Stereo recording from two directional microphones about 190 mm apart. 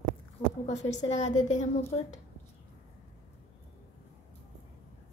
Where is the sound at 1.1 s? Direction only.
35° left (ahead or behind).